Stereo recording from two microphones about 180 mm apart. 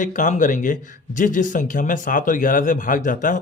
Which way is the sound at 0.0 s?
45° left (ahead or behind).